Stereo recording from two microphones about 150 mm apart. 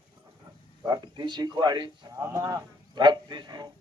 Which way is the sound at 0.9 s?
30° right (ahead or behind).